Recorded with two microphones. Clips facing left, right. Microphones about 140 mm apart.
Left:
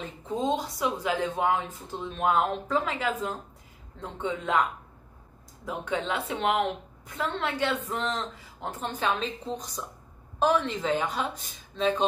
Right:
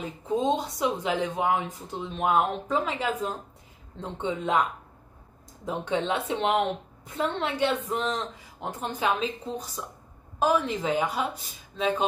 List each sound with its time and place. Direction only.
0.6 s speech: 20° right (ahead or behind)
5.7 s a woman's voice: 25° right (ahead or behind)